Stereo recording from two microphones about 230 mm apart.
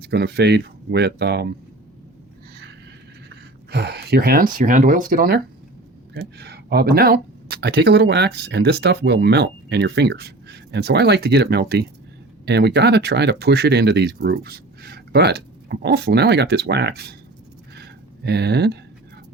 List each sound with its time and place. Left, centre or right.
0.0 s speech: right
3.2 s speech: right
17.7 s a sound: right